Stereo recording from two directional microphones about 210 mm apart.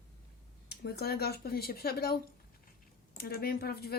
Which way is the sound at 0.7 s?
50° left (ahead or behind).